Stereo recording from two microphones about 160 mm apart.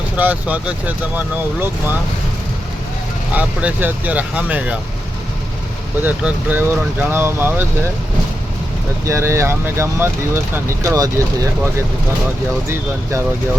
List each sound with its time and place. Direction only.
0.2 s speech: 10° right (ahead or behind)
3.3 s speech: 10° right (ahead or behind)
6.0 s speech: 10° right (ahead or behind)
9.0 s speech: 15° right (ahead or behind)